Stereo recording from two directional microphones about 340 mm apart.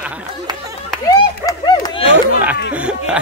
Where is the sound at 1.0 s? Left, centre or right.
Centre.